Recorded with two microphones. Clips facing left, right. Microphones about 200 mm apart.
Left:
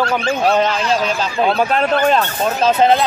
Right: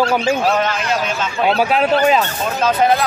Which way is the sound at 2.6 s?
30° left (ahead or behind).